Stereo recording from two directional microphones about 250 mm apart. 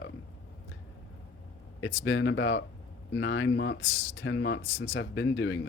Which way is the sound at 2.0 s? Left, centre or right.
Left.